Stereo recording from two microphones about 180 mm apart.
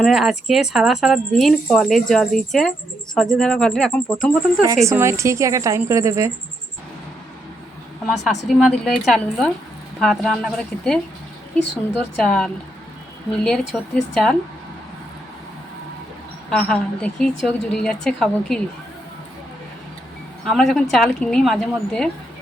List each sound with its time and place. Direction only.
0.0 s speech: 5° right (ahead or behind)
4.9 s a woman's voice: 15° right (ahead or behind)
8.0 s speech: centre (ahead or behind)
12.2 s speech: 5° left (ahead or behind)
16.5 s speech: 5° left (ahead or behind)
20.4 s speech: centre (ahead or behind)